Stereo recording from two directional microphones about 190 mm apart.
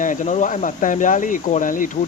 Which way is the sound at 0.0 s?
40° left (ahead or behind).